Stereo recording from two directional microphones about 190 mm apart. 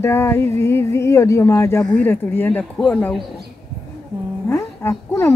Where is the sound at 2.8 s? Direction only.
5° left (ahead or behind).